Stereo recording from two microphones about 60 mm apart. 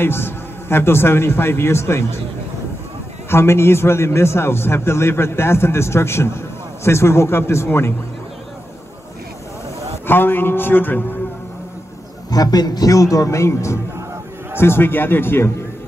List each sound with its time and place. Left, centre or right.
0.0 s a man's voice: left
3.3 s a man's voice: left
10.0 s a man's voice: left
12.3 s a man's voice: left
14.6 s a man's voice: left